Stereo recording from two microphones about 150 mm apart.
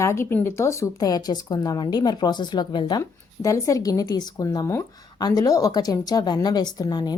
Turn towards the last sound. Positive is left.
turn(degrees=30)  # may be behind; listen again after turning